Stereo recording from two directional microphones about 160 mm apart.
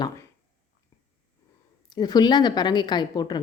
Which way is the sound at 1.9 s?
25° left (ahead or behind).